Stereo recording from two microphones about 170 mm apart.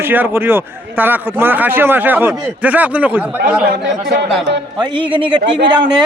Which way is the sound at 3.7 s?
90° right.